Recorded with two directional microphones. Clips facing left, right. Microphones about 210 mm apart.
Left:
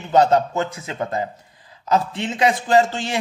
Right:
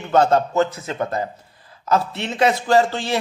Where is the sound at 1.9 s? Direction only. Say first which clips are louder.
Even; 20° left (ahead or behind).